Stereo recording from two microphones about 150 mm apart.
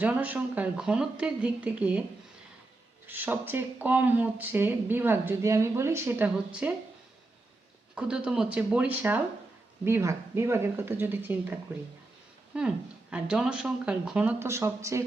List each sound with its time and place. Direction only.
0.0 s speech: 10° right (ahead or behind)
3.1 s speech: 15° right (ahead or behind)
7.9 s speech: 5° right (ahead or behind)
12.5 s speech: 5° right (ahead or behind)